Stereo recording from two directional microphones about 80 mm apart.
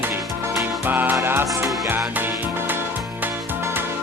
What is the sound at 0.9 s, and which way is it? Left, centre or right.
Music, right.